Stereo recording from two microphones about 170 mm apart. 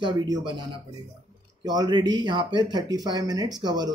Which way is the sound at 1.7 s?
25° right (ahead or behind).